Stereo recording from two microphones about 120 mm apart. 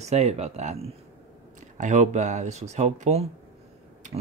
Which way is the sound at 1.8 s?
85° right.